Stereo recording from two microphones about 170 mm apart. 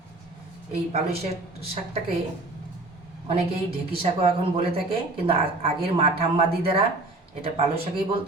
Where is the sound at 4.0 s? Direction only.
35° right (ahead or behind).